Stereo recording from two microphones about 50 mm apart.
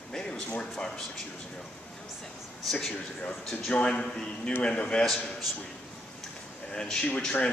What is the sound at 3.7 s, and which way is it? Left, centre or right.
Speech, centre.